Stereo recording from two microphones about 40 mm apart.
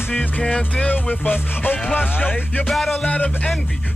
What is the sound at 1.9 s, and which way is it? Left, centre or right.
Music, left.